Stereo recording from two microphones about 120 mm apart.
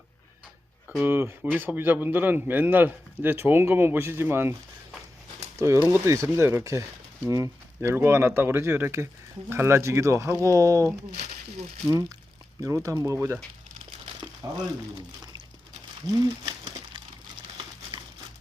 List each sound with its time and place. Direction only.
1.0 s a man's voice: 15° right (ahead or behind)
5.5 s speech: 25° right (ahead or behind)
11.1 s a sound: 70° right (ahead or behind)
11.9 s speech: 30° right (ahead or behind)
14.4 s speech: 30° right (ahead or behind)
17.9 s crumpling: 45° right (ahead or behind)